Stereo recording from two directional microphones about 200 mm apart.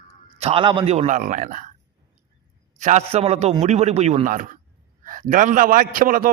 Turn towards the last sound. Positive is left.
turn(degrees=-45)  # may be behind; listen again after turning